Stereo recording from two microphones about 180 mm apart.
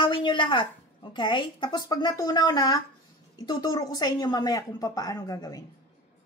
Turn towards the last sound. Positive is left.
turn(degrees=20)  # may be behind; listen again after turning